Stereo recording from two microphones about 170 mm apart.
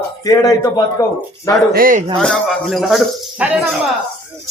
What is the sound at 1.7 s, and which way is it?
Speech, 55° right (ahead or behind).